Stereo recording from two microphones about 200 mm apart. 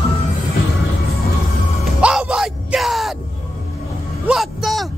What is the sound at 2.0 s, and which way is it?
Bellow, 5° right (ahead or behind).